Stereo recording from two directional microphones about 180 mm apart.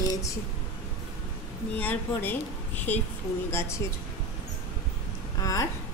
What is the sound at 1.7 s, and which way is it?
Speech, 10° left (ahead or behind).